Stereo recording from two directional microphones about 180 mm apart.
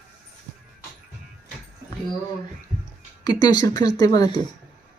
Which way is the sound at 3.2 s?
20° left (ahead or behind).